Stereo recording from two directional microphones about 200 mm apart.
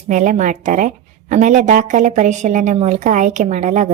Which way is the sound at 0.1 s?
40° right (ahead or behind).